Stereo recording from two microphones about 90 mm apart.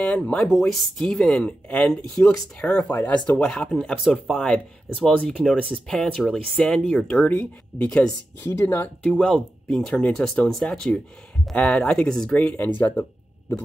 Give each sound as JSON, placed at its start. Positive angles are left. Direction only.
{"t": 0.0, "sound": "speech", "side_deg": 10}
{"t": 9.2, "sound": "speech", "side_deg": 5}